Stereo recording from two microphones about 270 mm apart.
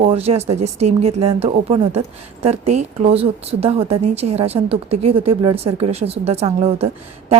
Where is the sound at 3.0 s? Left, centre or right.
Right.